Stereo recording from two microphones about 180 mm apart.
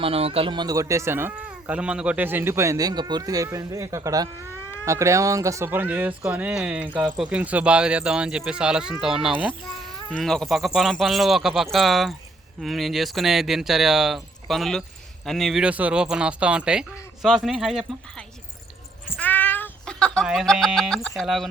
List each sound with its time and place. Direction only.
0.0 s speech: 35° right (ahead or behind); by 17.8 s centre (ahead or behind)
19.2 s music: 10° left (ahead or behind)